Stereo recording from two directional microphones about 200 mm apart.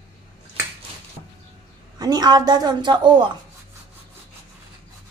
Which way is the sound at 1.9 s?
20° right (ahead or behind).